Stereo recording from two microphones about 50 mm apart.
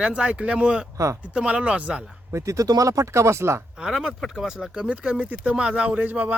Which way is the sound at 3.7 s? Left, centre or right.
Centre.